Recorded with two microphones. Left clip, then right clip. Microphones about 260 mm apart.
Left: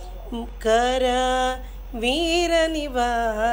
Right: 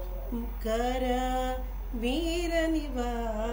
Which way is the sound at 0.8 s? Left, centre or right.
Centre.